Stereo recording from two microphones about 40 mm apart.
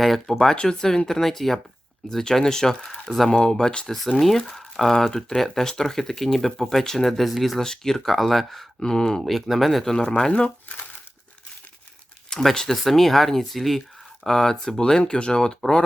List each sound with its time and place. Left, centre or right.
0.3 s speech: centre
0.5 s speech: left
1.0 s speech: centre
3.1 s speech: centre
3.4 s speech: centre
3.8 s speech: centre
7.6 s speech: centre
8.8 s speech: centre
9.2 s speech: centre
9.9 s speech: centre
12.3 s speech: centre
14.3 s speech: centre